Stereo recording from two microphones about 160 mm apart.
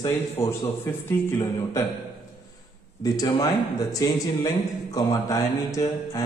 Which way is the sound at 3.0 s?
25° left (ahead or behind).